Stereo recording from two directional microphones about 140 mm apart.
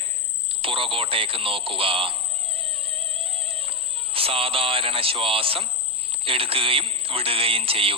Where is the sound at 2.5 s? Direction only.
45° right (ahead or behind).